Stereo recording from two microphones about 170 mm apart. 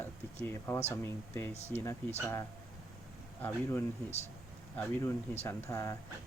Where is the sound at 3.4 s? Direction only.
15° left (ahead or behind).